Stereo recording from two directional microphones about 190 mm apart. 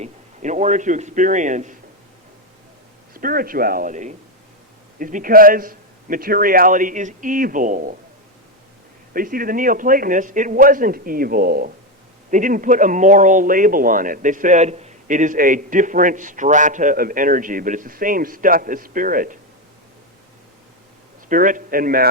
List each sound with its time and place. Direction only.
0.0 s a man's voice: 40° right (ahead or behind)
3.2 s a man's voice: 50° right (ahead or behind)
9.1 s a man's voice: 50° right (ahead or behind)
21.2 s a man's voice: 45° right (ahead or behind)